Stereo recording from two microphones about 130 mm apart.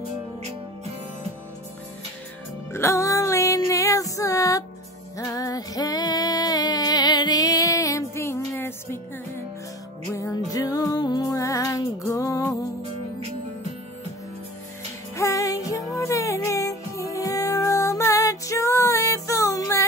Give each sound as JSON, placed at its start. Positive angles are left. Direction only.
{"t": 2.7, "sound": "music", "side_deg": 20}
{"t": 10.1, "sound": "music", "side_deg": 25}
{"t": 15.1, "sound": "music", "side_deg": 25}